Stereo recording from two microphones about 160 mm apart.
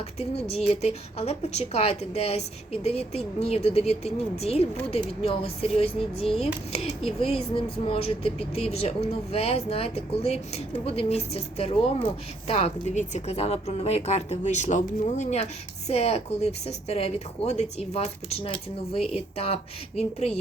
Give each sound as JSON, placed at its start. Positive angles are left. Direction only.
{"t": 0.2, "sound": "speech", "side_deg": 40}